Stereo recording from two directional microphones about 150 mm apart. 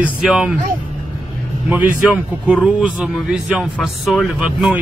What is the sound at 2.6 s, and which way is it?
Speech, 5° right (ahead or behind).